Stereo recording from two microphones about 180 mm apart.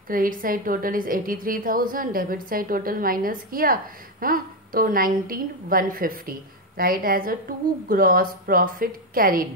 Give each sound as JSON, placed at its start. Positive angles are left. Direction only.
{"t": 0.1, "sound": "a woman's voice", "side_deg": -50}